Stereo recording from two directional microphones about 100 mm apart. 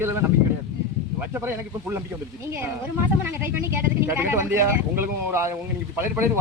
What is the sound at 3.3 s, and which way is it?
Speech, 25° right (ahead or behind).